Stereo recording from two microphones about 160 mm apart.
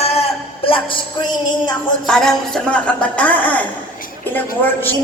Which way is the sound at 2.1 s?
5° left (ahead or behind).